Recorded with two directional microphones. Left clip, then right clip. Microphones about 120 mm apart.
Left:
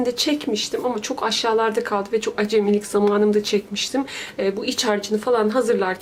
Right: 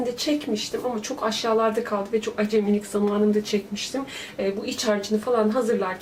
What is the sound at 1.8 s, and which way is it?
Speech, 45° left (ahead or behind).